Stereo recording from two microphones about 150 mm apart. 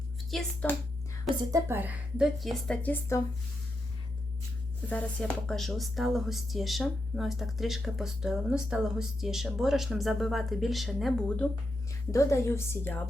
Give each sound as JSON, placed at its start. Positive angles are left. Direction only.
{"t": 0.3, "sound": "speech", "side_deg": 0}
{"t": 1.5, "sound": "speech", "side_deg": -20}
{"t": 4.9, "sound": "speech", "side_deg": 10}
{"t": 12.1, "sound": "a woman's voice", "side_deg": 20}